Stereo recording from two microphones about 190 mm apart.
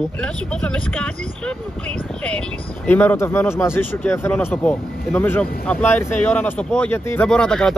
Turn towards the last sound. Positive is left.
turn(degrees=5)  # may be behind; listen again after turning